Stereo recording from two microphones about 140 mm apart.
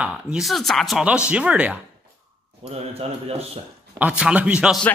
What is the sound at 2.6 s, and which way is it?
Speech, 45° right (ahead or behind).